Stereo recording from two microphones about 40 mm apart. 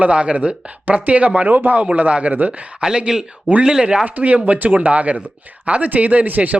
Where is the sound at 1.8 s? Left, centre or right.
Right.